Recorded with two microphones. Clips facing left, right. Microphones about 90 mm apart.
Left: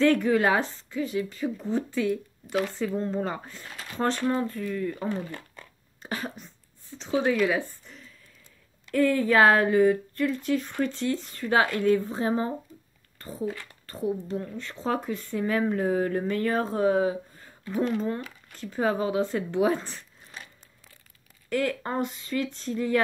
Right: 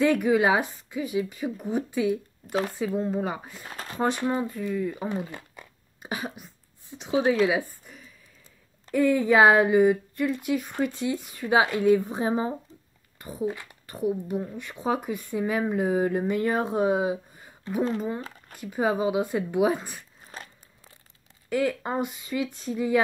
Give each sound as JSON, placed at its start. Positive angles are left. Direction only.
{"t": 0.0, "sound": "speech", "side_deg": -10}
{"t": 3.6, "sound": "speech", "side_deg": -40}
{"t": 4.0, "sound": "speech", "side_deg": -15}
{"t": 7.4, "sound": "a sound", "side_deg": -10}
{"t": 8.9, "sound": "speech", "side_deg": -15}
{"t": 21.5, "sound": "speech", "side_deg": -10}